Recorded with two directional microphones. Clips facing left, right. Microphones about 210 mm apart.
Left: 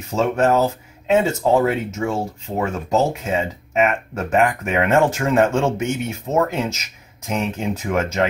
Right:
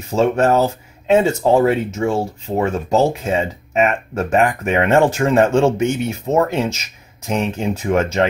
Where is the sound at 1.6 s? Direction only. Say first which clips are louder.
Right 4 dB; 30° right (ahead or behind).